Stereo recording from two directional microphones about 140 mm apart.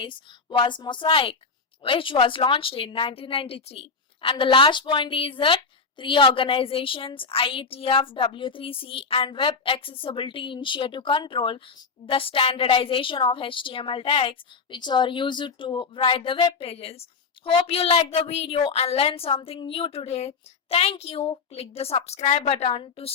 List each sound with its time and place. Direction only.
0.0 s a woman's voice: 40° left (ahead or behind)